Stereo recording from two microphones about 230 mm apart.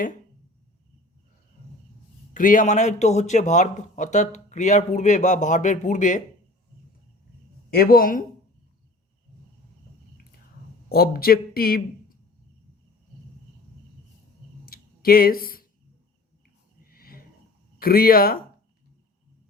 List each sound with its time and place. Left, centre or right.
2.3 s a man's voice: left
7.7 s a man's voice: left
10.8 s speech: left
14.6 s a sound: left
16.8 s a sound: left
17.7 s speech: left